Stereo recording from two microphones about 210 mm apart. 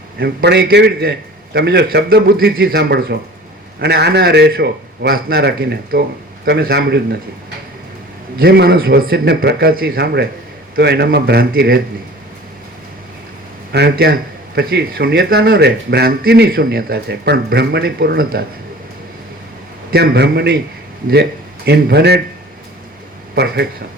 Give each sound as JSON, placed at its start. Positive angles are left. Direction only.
{"t": 0.2, "sound": "speech", "side_deg": -50}
{"t": 8.4, "sound": "speech", "side_deg": -50}
{"t": 13.7, "sound": "speech", "side_deg": -50}
{"t": 19.9, "sound": "speech", "side_deg": -50}
{"t": 23.3, "sound": "speech", "side_deg": -50}